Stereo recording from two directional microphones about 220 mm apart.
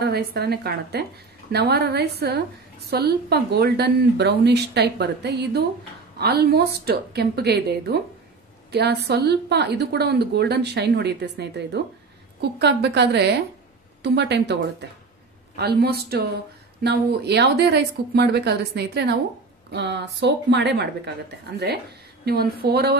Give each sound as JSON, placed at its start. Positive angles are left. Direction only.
{"t": 0.0, "sound": "a woman's voice", "side_deg": -50}